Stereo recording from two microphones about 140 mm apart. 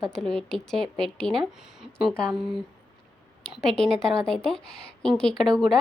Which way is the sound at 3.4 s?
5° left (ahead or behind).